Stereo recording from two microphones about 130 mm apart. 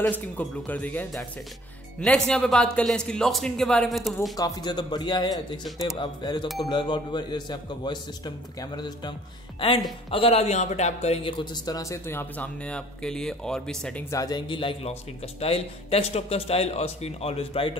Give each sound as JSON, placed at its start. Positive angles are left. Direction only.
{"t": 0.1, "sound": "speech", "side_deg": 15}
{"t": 4.4, "sound": "speech", "side_deg": 30}
{"t": 10.1, "sound": "speech", "side_deg": 50}
{"t": 11.2, "sound": "speech", "side_deg": 35}
{"t": 14.1, "sound": "a man's voice", "side_deg": 30}